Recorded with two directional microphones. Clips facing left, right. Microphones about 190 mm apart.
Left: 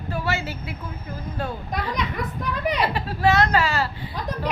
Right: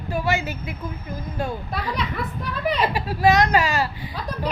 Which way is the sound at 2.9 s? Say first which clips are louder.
Right 3 dB; 10° right (ahead or behind).